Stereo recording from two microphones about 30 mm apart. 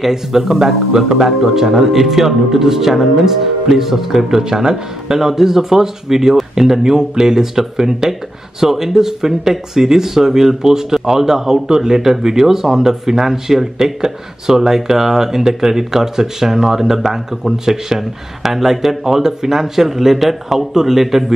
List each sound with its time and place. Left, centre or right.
0.0 s speech: centre